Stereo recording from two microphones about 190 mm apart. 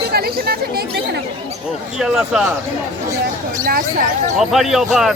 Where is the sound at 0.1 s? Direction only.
55° right (ahead or behind).